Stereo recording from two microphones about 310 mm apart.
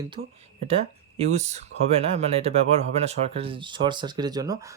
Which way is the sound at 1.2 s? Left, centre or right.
Right.